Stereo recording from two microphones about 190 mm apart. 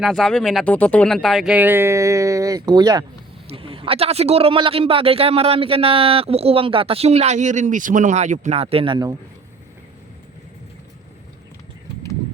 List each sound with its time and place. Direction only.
0.0 s speech: centre (ahead or behind); by 9.1 s 25° right (ahead or behind)